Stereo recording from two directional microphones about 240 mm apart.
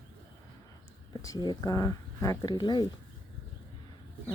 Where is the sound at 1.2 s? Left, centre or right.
Centre.